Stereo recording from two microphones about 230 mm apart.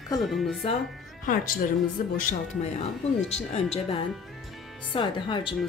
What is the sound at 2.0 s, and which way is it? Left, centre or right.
Speech, left.